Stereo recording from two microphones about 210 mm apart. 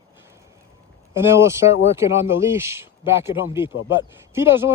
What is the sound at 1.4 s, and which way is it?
Speech, 15° right (ahead or behind).